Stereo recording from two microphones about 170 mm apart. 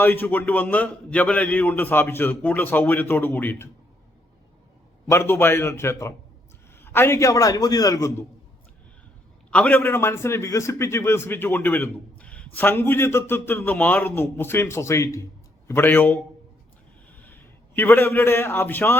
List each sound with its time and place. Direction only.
0.0 s a man's voice: 10° left (ahead or behind)
5.0 s a man's voice: 15° left (ahead or behind)
9.5 s a man's voice: 5° left (ahead or behind)